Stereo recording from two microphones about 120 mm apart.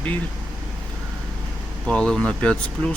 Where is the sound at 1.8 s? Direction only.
10° left (ahead or behind).